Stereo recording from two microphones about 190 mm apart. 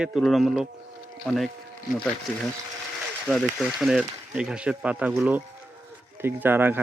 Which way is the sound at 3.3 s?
Centre (ahead or behind).